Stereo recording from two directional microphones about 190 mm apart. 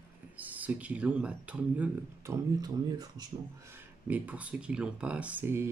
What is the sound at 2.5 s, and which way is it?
Speech, 20° right (ahead or behind).